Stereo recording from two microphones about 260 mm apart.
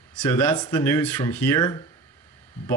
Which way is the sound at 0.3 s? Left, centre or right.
Centre.